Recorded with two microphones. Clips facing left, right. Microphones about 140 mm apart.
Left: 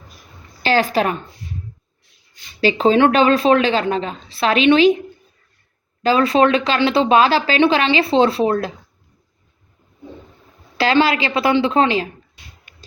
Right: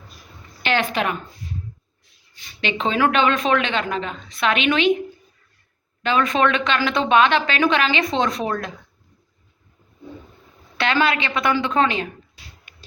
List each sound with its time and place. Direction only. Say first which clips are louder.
0.6 s a woman's voice: left 5 dB; 35° left (ahead or behind)
2.6 s speech: left 7 dB; 35° left (ahead or behind)
6.0 s speech: left 5 dB; 35° left (ahead or behind)
10.8 s speech: left 5 dB; 30° left (ahead or behind)